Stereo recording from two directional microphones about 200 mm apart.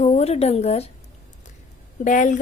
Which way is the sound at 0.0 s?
35° left (ahead or behind).